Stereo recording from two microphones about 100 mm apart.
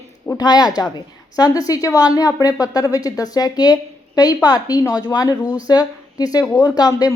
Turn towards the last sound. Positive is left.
turn(degrees=40)  # may be behind; listen again after turning